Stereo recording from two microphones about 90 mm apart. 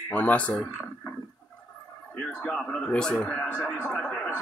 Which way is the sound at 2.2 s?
10° left (ahead or behind).